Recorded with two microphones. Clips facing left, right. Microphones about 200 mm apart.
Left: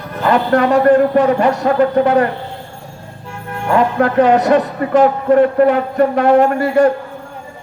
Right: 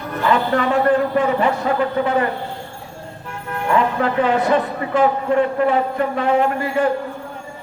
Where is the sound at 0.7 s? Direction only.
40° left (ahead or behind).